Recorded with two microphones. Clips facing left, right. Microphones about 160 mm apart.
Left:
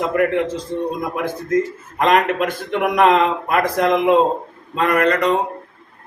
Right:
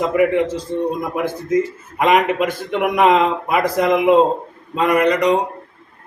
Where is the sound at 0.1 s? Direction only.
5° right (ahead or behind).